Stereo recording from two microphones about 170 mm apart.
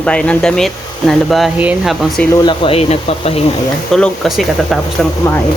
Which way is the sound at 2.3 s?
25° left (ahead or behind).